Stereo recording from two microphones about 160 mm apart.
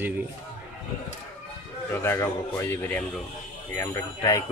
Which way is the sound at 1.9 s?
15° left (ahead or behind).